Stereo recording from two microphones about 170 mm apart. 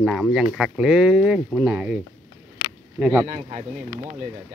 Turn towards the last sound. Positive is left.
turn(degrees=-40)  # may be behind; listen again after turning